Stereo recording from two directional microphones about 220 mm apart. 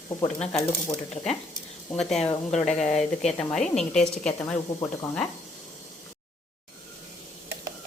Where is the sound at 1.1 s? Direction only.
30° left (ahead or behind).